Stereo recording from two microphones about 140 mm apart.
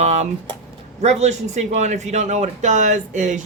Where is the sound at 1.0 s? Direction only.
55° right (ahead or behind).